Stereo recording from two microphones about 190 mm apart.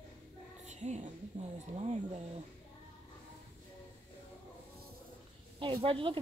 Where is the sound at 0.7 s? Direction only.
35° right (ahead or behind).